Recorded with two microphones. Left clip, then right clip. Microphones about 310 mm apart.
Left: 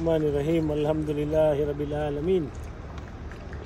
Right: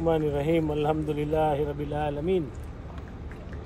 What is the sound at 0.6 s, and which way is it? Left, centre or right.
Speech, right.